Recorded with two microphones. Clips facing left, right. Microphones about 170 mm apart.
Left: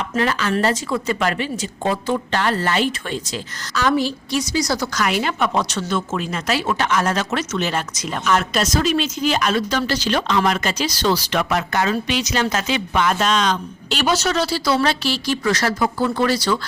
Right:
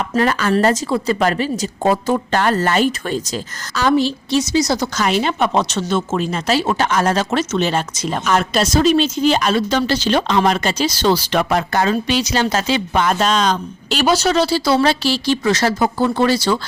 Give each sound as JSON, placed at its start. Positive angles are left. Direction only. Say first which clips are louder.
{"t": 0.0, "sound": "speech", "louder": "right 4 dB", "side_deg": -45}
{"t": 0.9, "sound": "a woman's voice", "louder": "right 4 dB", "side_deg": -35}
{"t": 3.9, "sound": "a woman's voice", "louder": "right 4 dB", "side_deg": -25}